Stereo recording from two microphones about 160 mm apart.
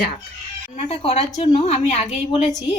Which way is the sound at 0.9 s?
40° left (ahead or behind).